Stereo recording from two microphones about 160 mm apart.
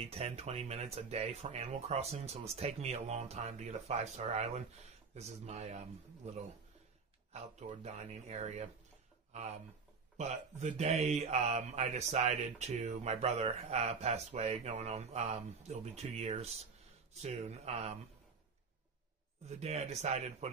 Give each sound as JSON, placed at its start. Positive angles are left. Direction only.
{"t": 0.0, "sound": "speech", "side_deg": -40}
{"t": 7.3, "sound": "speech", "side_deg": -45}
{"t": 19.6, "sound": "speech", "side_deg": -40}